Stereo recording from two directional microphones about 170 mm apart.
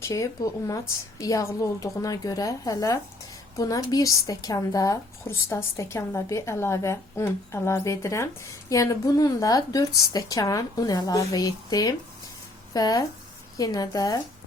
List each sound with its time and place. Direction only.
0.0 s speech: 20° left (ahead or behind)